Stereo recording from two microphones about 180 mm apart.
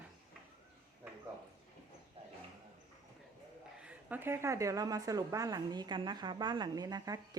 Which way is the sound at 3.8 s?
10° right (ahead or behind).